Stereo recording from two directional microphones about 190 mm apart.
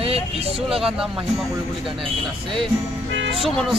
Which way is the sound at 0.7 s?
5° right (ahead or behind).